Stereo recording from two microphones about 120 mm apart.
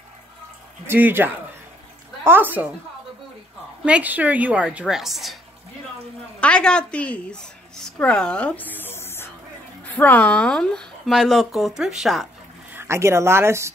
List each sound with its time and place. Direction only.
0.8 s a woman's voice: 15° right (ahead or behind)
3.8 s a woman's voice: 10° right (ahead or behind)
6.4 s a woman's voice: 10° left (ahead or behind)
12.7 s speech: 20° right (ahead or behind)